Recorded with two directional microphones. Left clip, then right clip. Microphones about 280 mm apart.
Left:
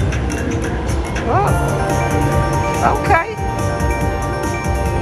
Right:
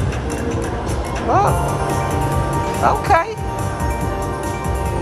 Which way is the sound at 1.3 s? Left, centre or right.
Centre.